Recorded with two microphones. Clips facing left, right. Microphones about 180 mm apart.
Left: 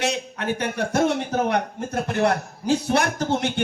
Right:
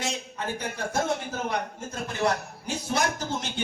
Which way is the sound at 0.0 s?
70° left (ahead or behind).